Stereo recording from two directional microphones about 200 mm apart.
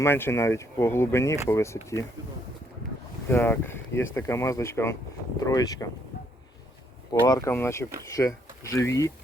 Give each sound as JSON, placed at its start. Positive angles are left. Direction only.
{"t": 0.0, "sound": "speech", "side_deg": 10}
{"t": 3.2, "sound": "speech", "side_deg": 10}
{"t": 7.1, "sound": "speech", "side_deg": 15}